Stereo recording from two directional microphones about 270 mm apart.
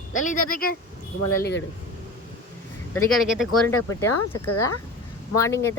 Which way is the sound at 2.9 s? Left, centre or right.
Centre.